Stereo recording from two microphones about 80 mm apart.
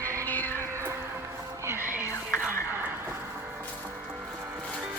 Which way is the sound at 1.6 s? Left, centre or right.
Right.